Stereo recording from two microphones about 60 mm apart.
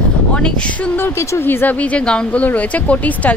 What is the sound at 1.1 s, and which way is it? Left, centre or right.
Speech, left.